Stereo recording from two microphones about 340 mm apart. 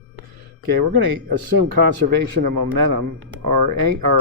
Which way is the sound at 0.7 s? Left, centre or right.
Right.